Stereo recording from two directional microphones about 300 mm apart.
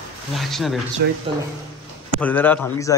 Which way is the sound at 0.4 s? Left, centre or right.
Centre.